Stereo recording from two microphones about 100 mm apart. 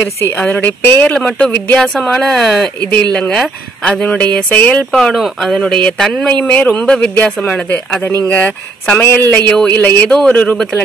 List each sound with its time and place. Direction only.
0.2 s speech: 20° left (ahead or behind)
1.8 s speech: centre (ahead or behind)
4.9 s speech: centre (ahead or behind)